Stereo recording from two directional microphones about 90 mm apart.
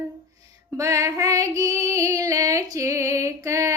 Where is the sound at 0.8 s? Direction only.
35° right (ahead or behind).